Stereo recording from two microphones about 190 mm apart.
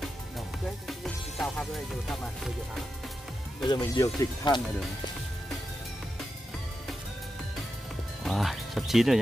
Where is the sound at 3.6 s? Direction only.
20° left (ahead or behind).